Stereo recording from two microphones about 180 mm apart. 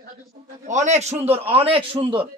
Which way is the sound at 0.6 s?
40° right (ahead or behind).